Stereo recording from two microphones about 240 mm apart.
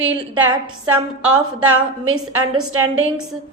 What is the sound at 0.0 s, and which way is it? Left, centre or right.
A woman's voice, right.